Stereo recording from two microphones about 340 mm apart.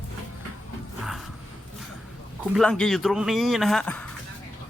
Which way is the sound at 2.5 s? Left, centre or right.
Centre.